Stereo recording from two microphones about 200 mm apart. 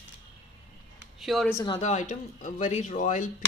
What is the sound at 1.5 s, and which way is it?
Speech, 15° left (ahead or behind).